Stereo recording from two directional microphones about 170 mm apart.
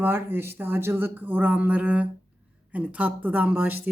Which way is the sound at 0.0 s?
10° right (ahead or behind).